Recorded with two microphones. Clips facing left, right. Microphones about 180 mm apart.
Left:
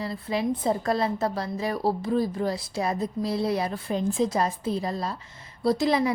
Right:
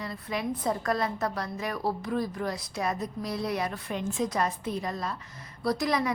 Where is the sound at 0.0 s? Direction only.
30° left (ahead or behind).